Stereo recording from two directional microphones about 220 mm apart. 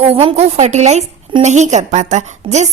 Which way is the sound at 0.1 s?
25° right (ahead or behind).